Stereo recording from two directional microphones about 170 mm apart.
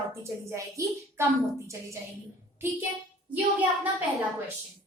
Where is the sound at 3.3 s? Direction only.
10° right (ahead or behind).